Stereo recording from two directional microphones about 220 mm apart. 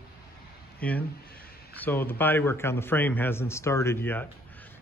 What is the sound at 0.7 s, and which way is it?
A man's voice, 5° left (ahead or behind).